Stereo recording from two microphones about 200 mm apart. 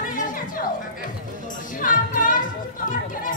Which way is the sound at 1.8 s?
40° left (ahead or behind).